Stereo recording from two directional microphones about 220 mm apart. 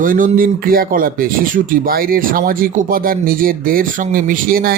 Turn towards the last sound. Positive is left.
turn(degrees=-40)  # may be behind; listen again after turning